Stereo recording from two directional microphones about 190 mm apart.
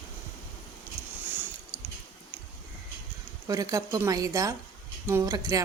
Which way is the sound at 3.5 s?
20° right (ahead or behind).